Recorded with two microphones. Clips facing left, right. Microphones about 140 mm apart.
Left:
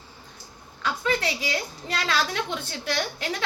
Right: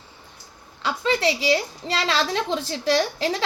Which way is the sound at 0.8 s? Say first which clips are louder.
Right 3 dB; 25° right (ahead or behind).